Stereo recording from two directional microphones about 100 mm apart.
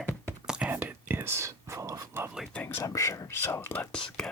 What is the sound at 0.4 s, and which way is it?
Whispering, 10° right (ahead or behind).